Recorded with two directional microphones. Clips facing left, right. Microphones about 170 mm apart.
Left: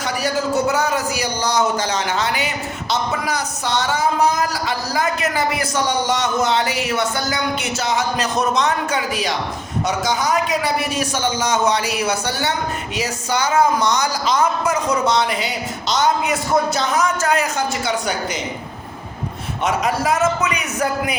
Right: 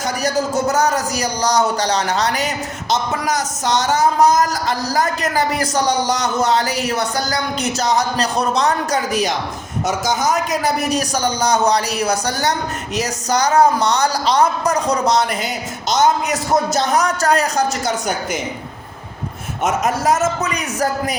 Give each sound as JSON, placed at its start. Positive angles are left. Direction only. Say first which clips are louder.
{"t": 0.0, "sound": "speech", "louder": "right 2 dB", "side_deg": -45}
{"t": 19.6, "sound": "speech", "louder": "right 2 dB", "side_deg": -45}